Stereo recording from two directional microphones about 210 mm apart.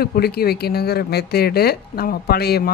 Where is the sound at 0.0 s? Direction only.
45° left (ahead or behind).